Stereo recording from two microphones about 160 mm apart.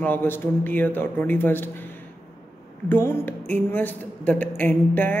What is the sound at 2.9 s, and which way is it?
A man's voice, 15° left (ahead or behind).